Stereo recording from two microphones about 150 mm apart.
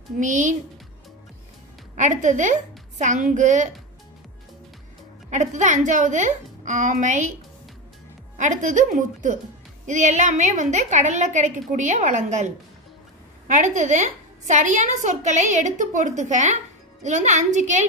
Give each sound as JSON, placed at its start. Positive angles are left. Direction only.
{"t": 0.2, "sound": "a woman's voice", "side_deg": -55}
{"t": 2.0, "sound": "a woman's voice", "side_deg": -55}
{"t": 5.3, "sound": "a woman's voice", "side_deg": -55}
{"t": 8.4, "sound": "a woman's voice", "side_deg": -55}